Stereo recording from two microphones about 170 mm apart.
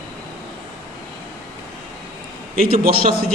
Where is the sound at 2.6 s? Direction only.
60° right (ahead or behind).